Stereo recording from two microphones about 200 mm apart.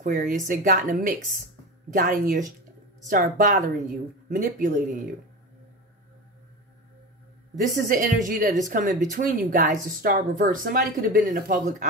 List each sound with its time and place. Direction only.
0.0 s a woman's voice: 40° right (ahead or behind)
7.5 s a woman's voice: 45° right (ahead or behind)